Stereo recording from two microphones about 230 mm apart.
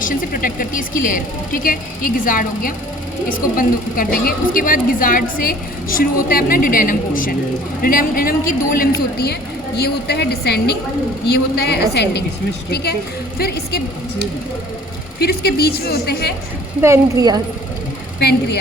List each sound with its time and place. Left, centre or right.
0.0 s a woman's voice: left
15.2 s a woman's voice: left
16.8 s a woman's voice: centre
18.2 s a woman's voice: left